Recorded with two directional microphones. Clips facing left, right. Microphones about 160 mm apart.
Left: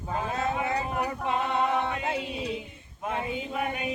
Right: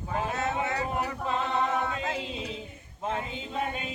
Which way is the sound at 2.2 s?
25° right (ahead or behind).